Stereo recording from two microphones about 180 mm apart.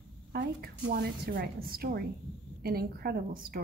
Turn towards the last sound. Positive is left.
turn(degrees=-55)  # may be behind; listen again after turning